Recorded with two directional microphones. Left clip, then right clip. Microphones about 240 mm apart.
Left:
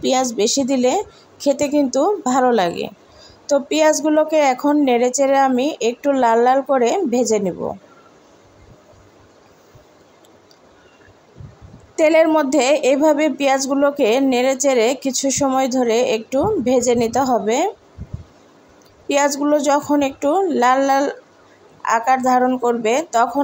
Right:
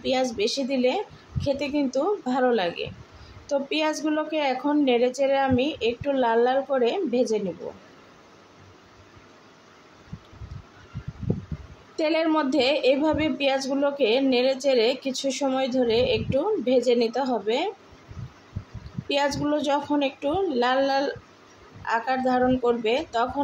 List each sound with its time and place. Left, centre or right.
0.0 s a woman's voice: left
11.9 s a woman's voice: left
19.0 s a woman's voice: left